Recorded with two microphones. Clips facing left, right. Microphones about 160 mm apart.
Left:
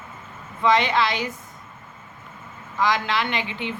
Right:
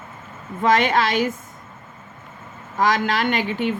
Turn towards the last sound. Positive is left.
turn(degrees=-45)  # may be behind; listen again after turning